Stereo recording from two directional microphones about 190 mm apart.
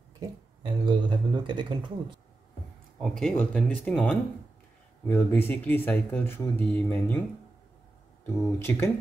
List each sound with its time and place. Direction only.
0.2 s speech: 25° right (ahead or behind)
3.0 s speech: centre (ahead or behind)
8.4 s speech: 10° left (ahead or behind)